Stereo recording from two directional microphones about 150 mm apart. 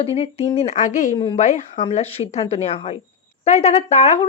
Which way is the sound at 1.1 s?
35° left (ahead or behind).